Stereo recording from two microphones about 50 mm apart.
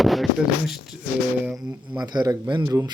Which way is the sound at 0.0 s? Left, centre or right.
Centre.